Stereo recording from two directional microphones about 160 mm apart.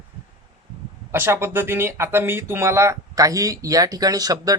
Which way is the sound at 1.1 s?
15° right (ahead or behind).